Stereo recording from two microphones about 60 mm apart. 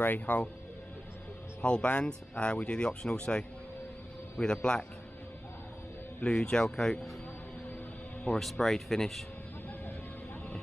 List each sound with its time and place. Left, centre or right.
0.0 s speech: left
1.6 s speech: centre
6.2 s speech: centre
8.3 s speech: centre